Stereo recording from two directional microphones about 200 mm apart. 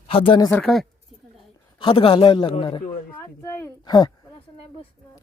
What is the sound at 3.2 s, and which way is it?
Speech, 15° left (ahead or behind).